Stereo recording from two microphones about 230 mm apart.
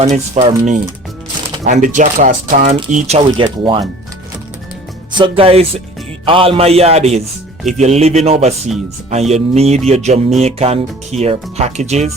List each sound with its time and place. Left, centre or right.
0.0 s speech: right
3.4 s speech: centre
5.1 s speech: right